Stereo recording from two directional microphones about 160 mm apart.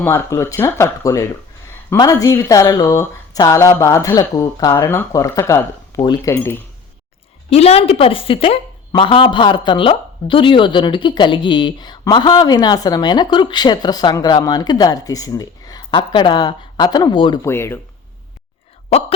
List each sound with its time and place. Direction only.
0.0 s a woman's voice: 15° left (ahead or behind)
7.5 s a woman's voice: 40° left (ahead or behind)
17.4 s speech: 15° left (ahead or behind)